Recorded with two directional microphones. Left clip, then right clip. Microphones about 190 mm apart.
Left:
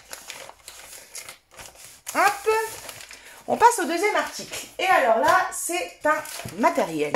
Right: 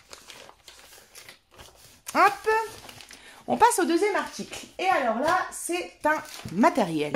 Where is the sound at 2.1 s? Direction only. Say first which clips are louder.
Even; 45° right (ahead or behind).